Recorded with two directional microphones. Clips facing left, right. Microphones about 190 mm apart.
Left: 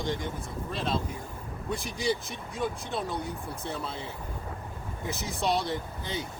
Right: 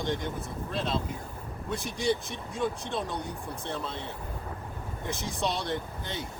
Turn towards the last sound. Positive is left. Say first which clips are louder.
# even
turn(degrees=0)  # may be behind; listen again after turning